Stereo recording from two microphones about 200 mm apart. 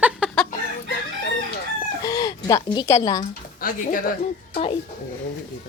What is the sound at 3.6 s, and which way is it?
Speech, 45° left (ahead or behind).